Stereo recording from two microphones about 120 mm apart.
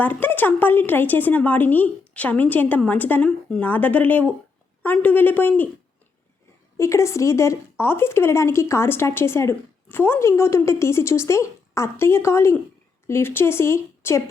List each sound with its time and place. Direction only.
0.0 s a woman's voice: 15° left (ahead or behind)
6.7 s speech: 25° left (ahead or behind)